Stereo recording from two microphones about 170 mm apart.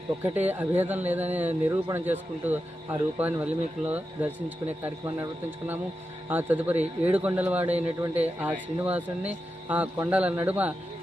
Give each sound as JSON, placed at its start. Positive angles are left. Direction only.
{"t": 0.2, "sound": "speech", "side_deg": -10}